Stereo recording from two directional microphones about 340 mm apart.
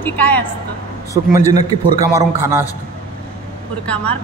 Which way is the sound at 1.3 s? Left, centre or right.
Centre.